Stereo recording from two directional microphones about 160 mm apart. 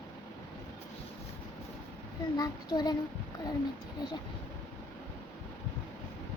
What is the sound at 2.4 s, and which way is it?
Child singing, 25° left (ahead or behind).